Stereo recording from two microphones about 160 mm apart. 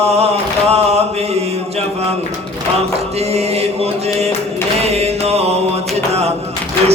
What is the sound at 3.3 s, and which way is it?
Mantra, 40° right (ahead or behind).